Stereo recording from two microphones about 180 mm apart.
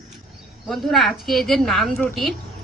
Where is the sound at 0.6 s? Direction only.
Centre (ahead or behind).